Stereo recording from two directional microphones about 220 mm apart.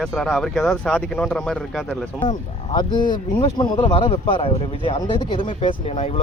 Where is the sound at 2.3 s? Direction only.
20° left (ahead or behind).